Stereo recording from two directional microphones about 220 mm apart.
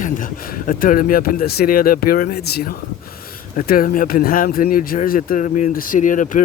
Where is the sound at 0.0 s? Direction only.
40° left (ahead or behind).